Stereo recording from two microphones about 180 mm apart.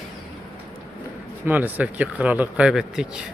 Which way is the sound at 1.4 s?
10° right (ahead or behind).